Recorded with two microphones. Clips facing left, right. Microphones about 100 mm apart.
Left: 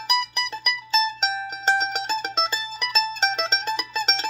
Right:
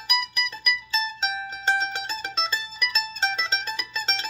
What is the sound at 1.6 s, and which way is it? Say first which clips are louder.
Mandolin: left 3 dB; 30° left (ahead or behind).